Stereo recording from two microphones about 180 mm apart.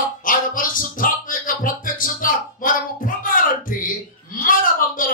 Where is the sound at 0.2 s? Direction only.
50° left (ahead or behind).